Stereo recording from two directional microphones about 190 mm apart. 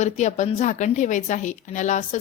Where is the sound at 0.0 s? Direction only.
40° left (ahead or behind).